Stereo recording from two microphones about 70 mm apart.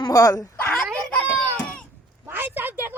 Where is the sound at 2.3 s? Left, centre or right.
Right.